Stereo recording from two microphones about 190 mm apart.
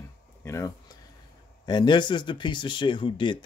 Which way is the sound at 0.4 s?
15° left (ahead or behind).